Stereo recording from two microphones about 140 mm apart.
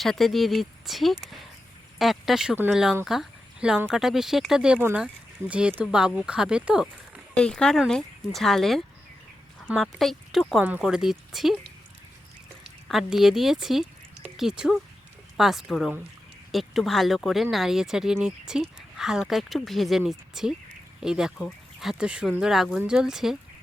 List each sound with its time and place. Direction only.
0.0 s speech: centre (ahead or behind)
7.3 s speech: 5° left (ahead or behind)
10.6 s speech: 10° right (ahead or behind)
12.9 s speech: centre (ahead or behind)